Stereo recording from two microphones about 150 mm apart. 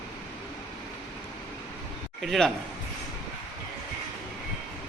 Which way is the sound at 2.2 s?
Centre (ahead or behind).